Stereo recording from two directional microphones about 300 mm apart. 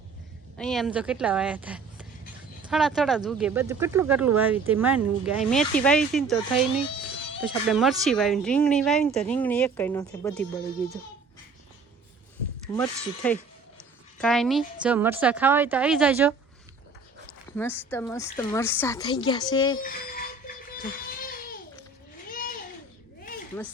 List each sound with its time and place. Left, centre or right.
0.5 s speech: centre
7.7 s speech: centre
12.6 s speech: centre
17.6 s a woman's voice: centre
19.8 s music: left
22.3 s a sound: left